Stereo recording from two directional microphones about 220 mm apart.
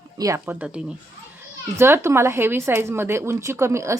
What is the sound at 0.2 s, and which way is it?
Speech, 15° right (ahead or behind).